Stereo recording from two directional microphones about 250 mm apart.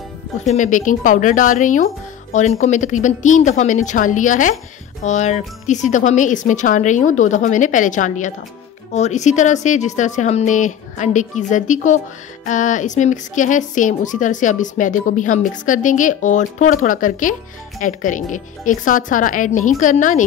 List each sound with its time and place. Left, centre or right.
0.5 s a woman's voice: left